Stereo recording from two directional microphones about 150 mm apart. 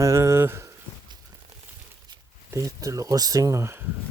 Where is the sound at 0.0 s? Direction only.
20° right (ahead or behind).